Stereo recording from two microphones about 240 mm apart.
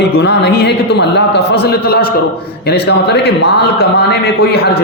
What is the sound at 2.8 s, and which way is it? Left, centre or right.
A man's voice, left.